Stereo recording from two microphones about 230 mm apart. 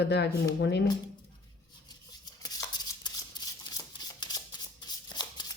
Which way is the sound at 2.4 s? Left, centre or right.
Centre.